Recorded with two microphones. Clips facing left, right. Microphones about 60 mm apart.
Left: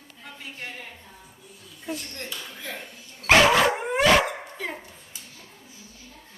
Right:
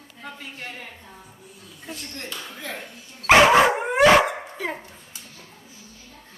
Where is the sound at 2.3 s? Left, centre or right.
Centre.